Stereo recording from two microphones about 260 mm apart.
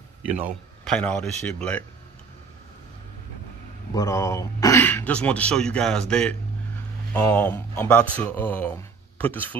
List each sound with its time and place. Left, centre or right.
0.8 s speech: centre
3.9 s speech: centre